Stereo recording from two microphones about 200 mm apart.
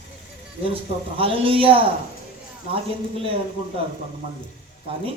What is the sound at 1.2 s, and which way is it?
Speech, 25° right (ahead or behind).